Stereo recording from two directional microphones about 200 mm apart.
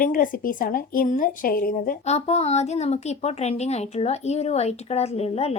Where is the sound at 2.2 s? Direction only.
30° left (ahead or behind).